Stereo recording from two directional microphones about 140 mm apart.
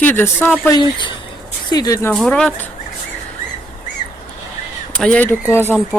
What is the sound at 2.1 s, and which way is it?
Speech, 5° left (ahead or behind).